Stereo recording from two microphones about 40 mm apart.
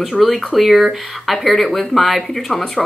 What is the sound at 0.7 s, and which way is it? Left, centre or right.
Speech, centre.